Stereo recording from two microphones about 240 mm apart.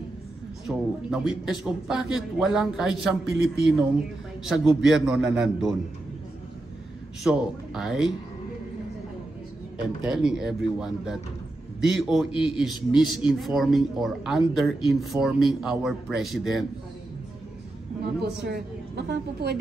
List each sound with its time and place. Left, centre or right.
0.7 s speech: centre
7.2 s speech: centre
10.0 s speech: centre
18.2 s a woman's voice: right